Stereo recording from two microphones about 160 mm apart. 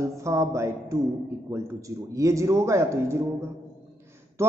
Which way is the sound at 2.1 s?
20° right (ahead or behind).